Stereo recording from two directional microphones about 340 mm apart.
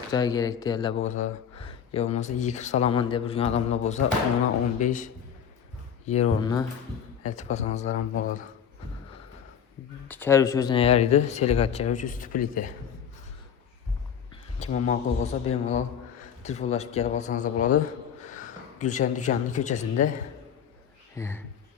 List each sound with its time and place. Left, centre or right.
0.1 s speech: centre
6.1 s speech: centre
7.2 s speech: left
10.1 s speech: centre; by 12.7 s left
14.6 s a man's voice: left
21.2 s speech: centre